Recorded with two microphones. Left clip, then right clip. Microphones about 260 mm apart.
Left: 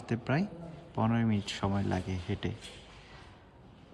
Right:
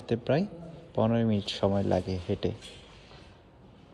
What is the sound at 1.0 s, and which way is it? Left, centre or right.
Speech, centre.